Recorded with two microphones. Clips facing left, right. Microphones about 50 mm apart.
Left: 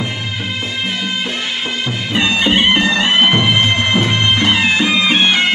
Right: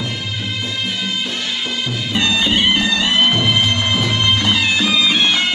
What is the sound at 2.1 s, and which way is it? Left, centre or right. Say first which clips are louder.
Music: left 3 dB; left.